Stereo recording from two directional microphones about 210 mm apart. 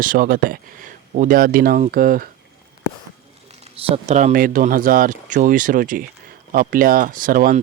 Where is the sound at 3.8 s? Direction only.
30° right (ahead or behind).